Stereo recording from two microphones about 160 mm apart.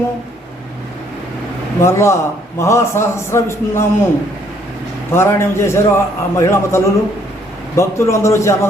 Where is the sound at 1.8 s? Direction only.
15° left (ahead or behind).